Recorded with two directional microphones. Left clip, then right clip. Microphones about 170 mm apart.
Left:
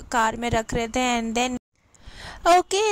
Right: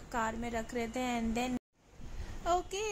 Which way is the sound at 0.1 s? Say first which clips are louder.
Left 13 dB; 60° left (ahead or behind).